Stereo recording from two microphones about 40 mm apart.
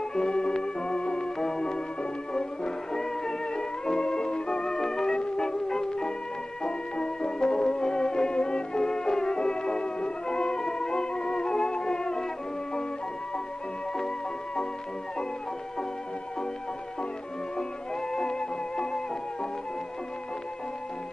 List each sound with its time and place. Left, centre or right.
0.1 s music: centre
5.1 s music: left
13.9 s music: centre
18.1 s music: centre